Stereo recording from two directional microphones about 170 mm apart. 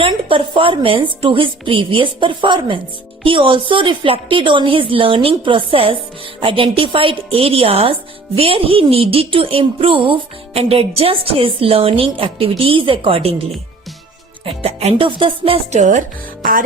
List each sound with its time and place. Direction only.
0.0 s a woman's voice: 30° right (ahead or behind)
14.4 s a woman's voice: 35° right (ahead or behind); by 16.6 s 55° right (ahead or behind)